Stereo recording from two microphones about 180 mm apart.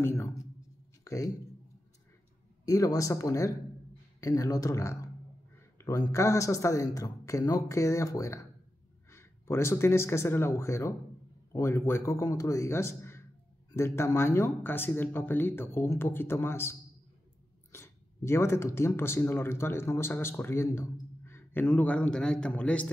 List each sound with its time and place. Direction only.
0.0 s a sound: 15° left (ahead or behind)
2.6 s speech: 20° left (ahead or behind)
17.7 s speech: 15° left (ahead or behind)